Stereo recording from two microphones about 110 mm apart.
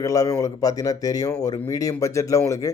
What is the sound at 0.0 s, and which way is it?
A man's voice, 30° left (ahead or behind).